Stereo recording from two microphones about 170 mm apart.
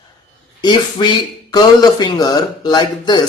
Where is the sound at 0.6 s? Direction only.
25° left (ahead or behind).